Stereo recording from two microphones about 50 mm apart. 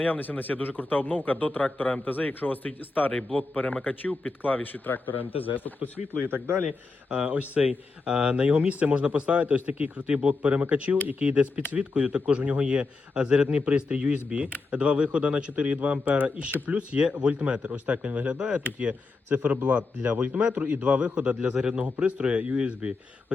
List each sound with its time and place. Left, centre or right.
0.0 s a man's voice: left
5.8 s speech: right
7.1 s a man's voice: right